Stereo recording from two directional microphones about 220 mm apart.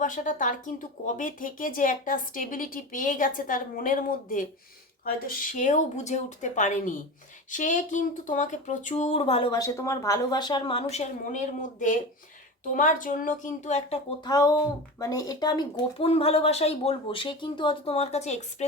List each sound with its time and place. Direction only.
0.0 s speech: 35° left (ahead or behind)
14.3 s speech: 15° left (ahead or behind)